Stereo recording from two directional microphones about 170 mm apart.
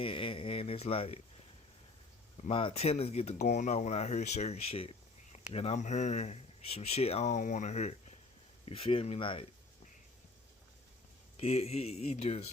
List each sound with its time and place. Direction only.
0.0 s speech: 30° left (ahead or behind)
2.5 s speech: 30° left (ahead or behind)
11.3 s speech: 35° left (ahead or behind)